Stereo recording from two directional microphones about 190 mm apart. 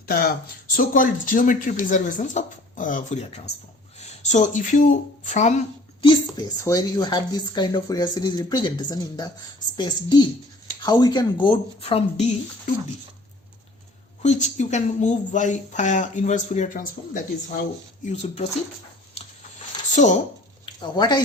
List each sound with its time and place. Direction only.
0.0 s speech: 50° left (ahead or behind)
6.0 s speech: 25° left (ahead or behind)
14.2 s a woman's voice: 35° left (ahead or behind)
20.7 s speech: 25° left (ahead or behind)